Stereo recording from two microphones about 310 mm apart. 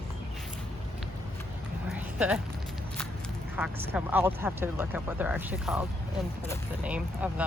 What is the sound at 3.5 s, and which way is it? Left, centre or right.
Speech, centre.